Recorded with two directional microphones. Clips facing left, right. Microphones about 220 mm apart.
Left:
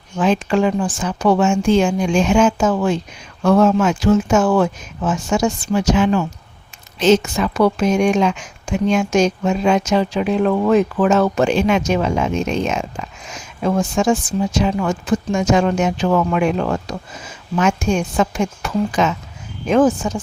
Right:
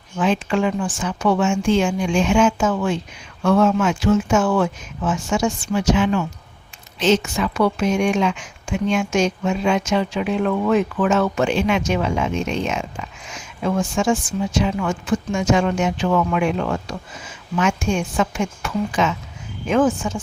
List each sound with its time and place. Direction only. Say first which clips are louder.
0.2 s speech: left 3 dB; 40° left (ahead or behind)